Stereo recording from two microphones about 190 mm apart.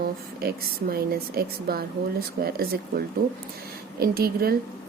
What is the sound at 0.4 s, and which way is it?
A woman's voice, 55° right (ahead or behind).